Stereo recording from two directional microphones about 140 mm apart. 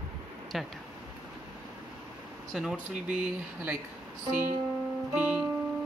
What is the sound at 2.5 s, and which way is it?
Speech, 5° right (ahead or behind).